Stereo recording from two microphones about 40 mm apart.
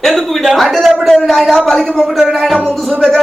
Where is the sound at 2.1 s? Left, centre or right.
Centre.